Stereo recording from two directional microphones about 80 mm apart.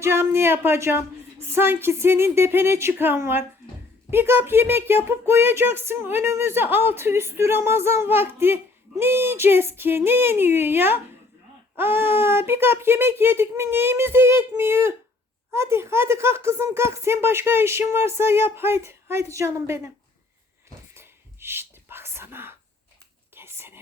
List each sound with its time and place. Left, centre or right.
0.0 s speech: right
20.9 s whispering: right